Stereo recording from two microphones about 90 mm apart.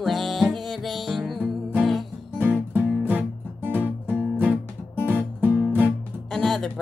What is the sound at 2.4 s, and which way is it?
Music, 20° right (ahead or behind).